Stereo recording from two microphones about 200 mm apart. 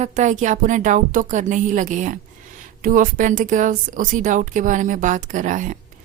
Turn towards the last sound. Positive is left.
turn(degrees=-40)  # may be behind; listen again after turning